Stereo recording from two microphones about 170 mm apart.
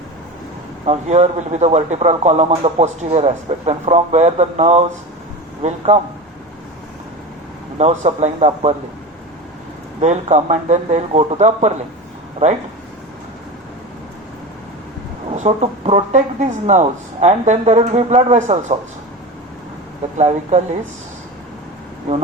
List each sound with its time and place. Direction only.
0.9 s speech: 40° right (ahead or behind)
7.8 s speech: 40° right (ahead or behind)
10.0 s speech: 40° right (ahead or behind)
15.3 s speech: 40° right (ahead or behind)
20.1 s speech: 40° right (ahead or behind)